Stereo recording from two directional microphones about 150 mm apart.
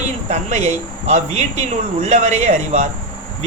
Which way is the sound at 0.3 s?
50° right (ahead or behind).